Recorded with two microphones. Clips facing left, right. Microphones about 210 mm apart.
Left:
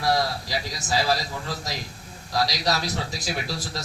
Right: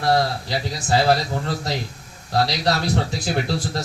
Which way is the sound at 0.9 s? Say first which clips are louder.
Right 6 dB; 60° right (ahead or behind).